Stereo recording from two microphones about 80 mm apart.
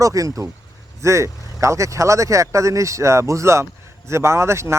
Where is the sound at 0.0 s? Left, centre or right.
Right.